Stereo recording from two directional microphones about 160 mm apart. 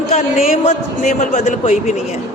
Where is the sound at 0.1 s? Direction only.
45° left (ahead or behind).